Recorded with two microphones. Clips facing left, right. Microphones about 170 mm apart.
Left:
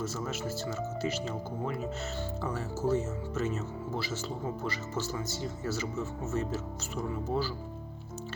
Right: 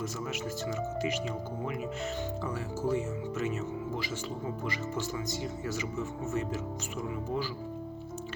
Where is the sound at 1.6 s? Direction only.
35° left (ahead or behind).